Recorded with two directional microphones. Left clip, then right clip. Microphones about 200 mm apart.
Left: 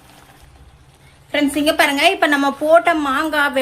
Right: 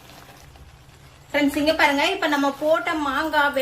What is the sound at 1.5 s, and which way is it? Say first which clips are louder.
A woman's voice: left 3 dB; 55° left (ahead or behind).